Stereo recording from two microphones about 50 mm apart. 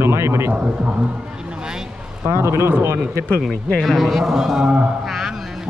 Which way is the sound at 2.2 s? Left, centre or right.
Right.